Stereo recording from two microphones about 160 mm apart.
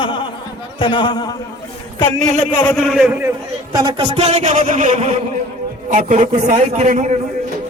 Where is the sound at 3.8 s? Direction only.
30° right (ahead or behind); by 7.1 s 50° right (ahead or behind).